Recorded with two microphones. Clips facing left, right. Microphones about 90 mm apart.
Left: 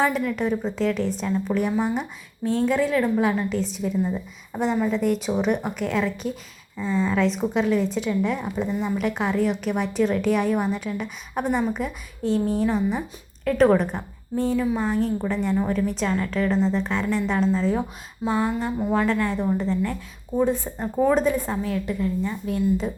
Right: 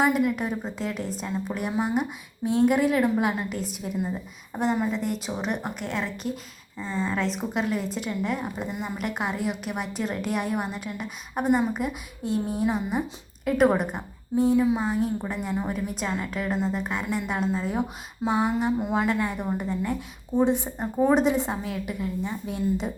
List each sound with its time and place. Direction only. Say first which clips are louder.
0.0 s a woman's voice: even; 10° right (ahead or behind)
14.5 s a woman's voice: right 2 dB; 20° right (ahead or behind)
14.8 s a woman's voice: left 3 dB; 5° right (ahead or behind); by 22.9 s 20° right (ahead or behind)